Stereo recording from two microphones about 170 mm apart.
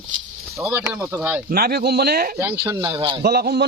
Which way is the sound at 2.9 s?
30° right (ahead or behind).